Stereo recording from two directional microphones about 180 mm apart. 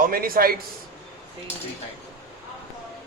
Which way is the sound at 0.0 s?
55° right (ahead or behind).